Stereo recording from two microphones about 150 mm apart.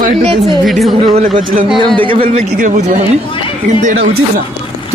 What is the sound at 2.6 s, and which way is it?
Speech, 55° right (ahead or behind).